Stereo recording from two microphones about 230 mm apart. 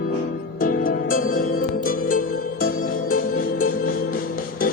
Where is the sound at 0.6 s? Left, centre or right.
Left.